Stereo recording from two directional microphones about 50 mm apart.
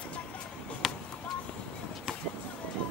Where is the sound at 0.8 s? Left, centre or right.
Centre.